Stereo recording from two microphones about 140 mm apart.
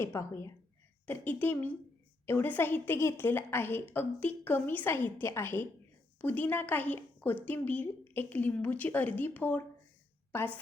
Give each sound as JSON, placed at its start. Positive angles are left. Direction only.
{"t": 0.0, "sound": "a woman's voice", "side_deg": 20}